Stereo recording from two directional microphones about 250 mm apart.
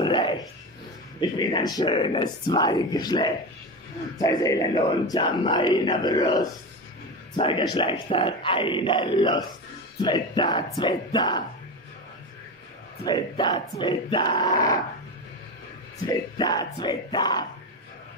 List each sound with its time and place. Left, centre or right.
0.0 s a sound: centre
1.2 s speech: centre
13.0 s speech: centre
16.1 s speech: centre